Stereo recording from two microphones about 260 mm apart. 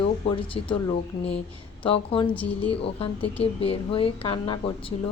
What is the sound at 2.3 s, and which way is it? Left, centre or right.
Speech, centre.